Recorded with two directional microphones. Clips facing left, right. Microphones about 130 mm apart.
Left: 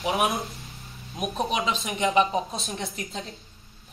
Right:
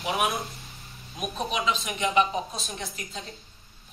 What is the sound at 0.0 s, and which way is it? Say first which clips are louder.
Speech: left 2 dB; 25° left (ahead or behind).